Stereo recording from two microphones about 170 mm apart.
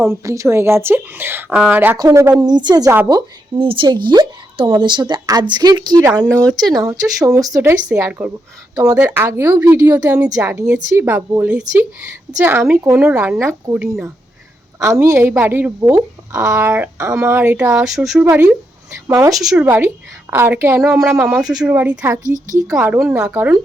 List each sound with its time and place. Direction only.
0.0 s a woman's voice: 15° right (ahead or behind)
9.0 s speech: 10° right (ahead or behind)
19.4 s speech: centre (ahead or behind)
19.6 s speech: 15° right (ahead or behind)
22.2 s a woman's voice: 50° right (ahead or behind)
22.6 s speech: 15° right (ahead or behind)